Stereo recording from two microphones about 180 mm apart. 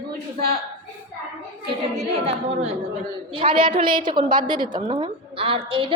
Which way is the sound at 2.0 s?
35° right (ahead or behind).